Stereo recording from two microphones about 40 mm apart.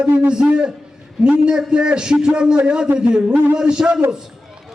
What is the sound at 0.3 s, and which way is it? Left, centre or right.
A man's voice, right.